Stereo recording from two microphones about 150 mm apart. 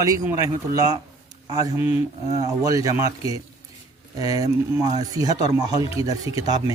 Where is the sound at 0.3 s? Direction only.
25° right (ahead or behind).